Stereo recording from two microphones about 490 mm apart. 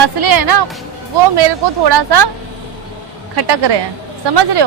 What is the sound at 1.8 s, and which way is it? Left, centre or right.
Speech, right.